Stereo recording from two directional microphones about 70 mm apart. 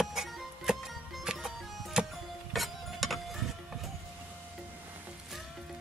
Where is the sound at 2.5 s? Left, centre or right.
Centre.